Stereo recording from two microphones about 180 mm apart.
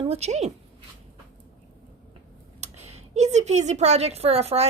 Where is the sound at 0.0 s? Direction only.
35° right (ahead or behind).